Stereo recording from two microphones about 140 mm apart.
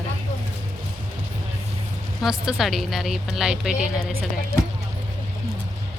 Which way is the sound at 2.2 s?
5° right (ahead or behind).